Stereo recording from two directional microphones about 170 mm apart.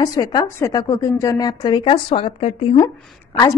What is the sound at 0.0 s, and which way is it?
A woman's voice, 20° left (ahead or behind).